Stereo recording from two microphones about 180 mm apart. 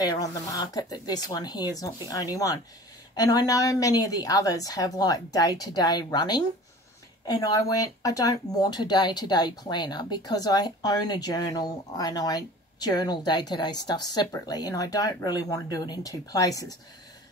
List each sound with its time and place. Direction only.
0.0 s speech: 20° left (ahead or behind)